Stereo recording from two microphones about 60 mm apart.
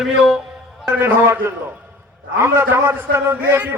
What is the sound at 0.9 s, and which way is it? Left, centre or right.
A man's voice, right.